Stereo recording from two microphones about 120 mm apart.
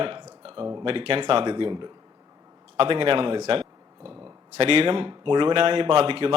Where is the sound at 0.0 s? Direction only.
45° right (ahead or behind).